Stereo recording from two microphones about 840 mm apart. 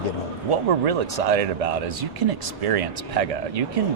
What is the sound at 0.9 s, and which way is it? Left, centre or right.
Speech, right.